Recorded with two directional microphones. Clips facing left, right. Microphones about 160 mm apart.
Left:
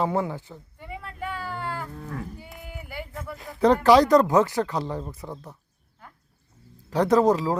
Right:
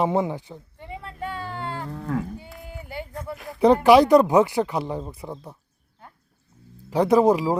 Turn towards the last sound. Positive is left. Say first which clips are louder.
# right 2 dB
turn(degrees=-10)  # may be behind; listen again after turning